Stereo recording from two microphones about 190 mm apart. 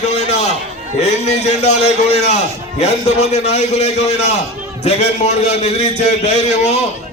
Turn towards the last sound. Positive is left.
turn(degrees=35)  # may be behind; listen again after turning